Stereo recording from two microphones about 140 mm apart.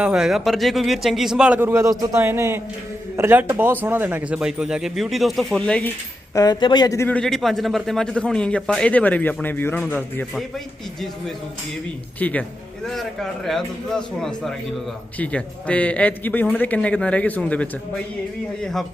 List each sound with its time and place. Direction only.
0.0 s speech: 5° right (ahead or behind)
6.3 s speech: 30° left (ahead or behind)
7.1 s a man's voice: 5° left (ahead or behind)
12.2 s a man's voice: 10° left (ahead or behind)